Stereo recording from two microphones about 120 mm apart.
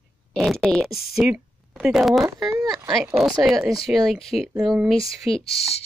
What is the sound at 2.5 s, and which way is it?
Speech, 30° right (ahead or behind).